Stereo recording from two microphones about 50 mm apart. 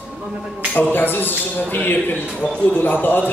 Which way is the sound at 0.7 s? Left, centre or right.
Left.